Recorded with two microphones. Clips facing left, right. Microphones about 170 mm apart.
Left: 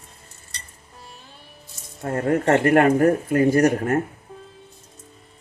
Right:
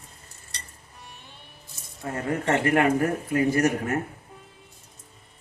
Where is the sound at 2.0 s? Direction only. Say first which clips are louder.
Left 6 dB; 45° left (ahead or behind).